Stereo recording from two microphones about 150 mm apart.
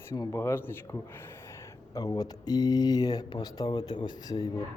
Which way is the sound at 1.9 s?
25° left (ahead or behind).